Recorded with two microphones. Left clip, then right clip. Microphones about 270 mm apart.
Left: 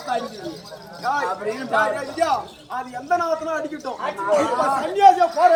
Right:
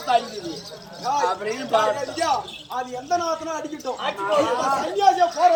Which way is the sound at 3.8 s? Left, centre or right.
Centre.